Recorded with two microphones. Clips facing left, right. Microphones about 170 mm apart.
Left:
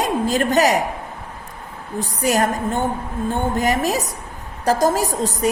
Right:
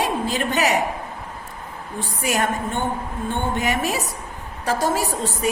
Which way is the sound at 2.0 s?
40° left (ahead or behind).